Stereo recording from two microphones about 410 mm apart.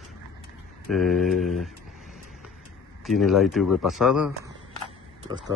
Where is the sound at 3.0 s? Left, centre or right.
Centre.